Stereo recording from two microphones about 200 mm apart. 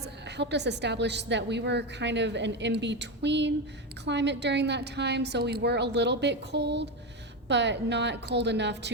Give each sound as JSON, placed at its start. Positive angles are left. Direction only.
{"t": 0.3, "sound": "a woman's voice", "side_deg": -60}